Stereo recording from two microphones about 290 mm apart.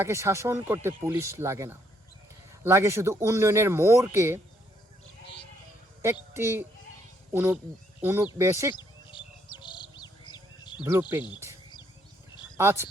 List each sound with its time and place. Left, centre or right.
0.0 s speech: centre
6.0 s speech: centre
8.7 s chirp: centre
12.5 s speech: centre